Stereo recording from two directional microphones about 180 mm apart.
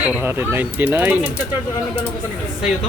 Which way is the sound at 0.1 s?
10° right (ahead or behind).